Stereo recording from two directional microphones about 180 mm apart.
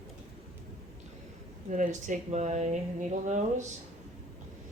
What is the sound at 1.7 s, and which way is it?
Speech, 45° right (ahead or behind).